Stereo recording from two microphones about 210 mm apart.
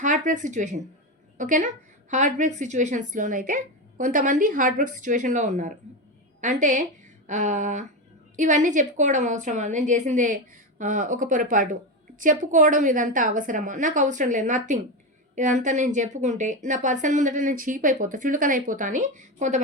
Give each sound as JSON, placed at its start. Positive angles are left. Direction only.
{"t": 0.0, "sound": "a woman's voice", "side_deg": -35}